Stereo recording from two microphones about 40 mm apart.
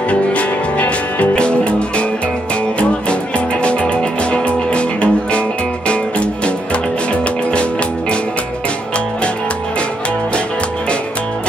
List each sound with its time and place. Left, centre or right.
0.1 s music: left